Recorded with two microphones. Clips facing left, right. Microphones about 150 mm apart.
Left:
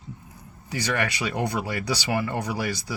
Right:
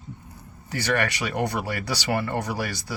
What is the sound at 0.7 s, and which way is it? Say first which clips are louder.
Speech: right 2 dB; 15° left (ahead or behind).